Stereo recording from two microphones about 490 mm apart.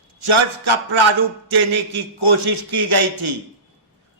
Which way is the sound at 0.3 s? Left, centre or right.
Right.